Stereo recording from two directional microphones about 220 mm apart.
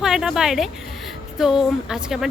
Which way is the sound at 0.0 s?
5° right (ahead or behind).